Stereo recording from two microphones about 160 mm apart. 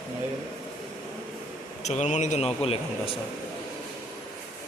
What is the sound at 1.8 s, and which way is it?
Speech, 45° left (ahead or behind).